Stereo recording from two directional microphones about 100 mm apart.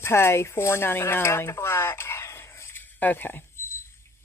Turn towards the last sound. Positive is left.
turn(degrees=20)  # may be behind; listen again after turning